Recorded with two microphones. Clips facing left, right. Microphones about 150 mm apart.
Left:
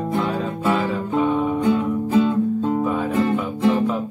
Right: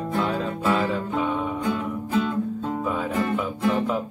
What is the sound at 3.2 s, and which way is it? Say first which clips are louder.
Music: left 5 dB; 20° left (ahead or behind).